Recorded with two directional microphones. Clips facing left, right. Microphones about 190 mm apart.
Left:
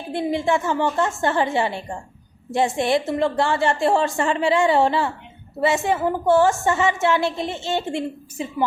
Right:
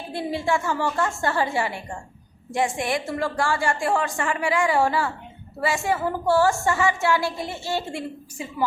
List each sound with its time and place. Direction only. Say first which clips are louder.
0.1 s a woman's voice: left 4 dB; 20° left (ahead or behind)